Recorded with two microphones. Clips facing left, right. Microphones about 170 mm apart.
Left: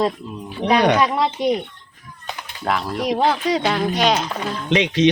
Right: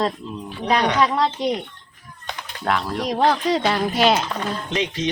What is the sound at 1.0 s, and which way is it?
Speech, 10° left (ahead or behind).